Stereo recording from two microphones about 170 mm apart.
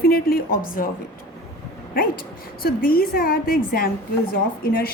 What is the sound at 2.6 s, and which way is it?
A woman's voice, 60° left (ahead or behind).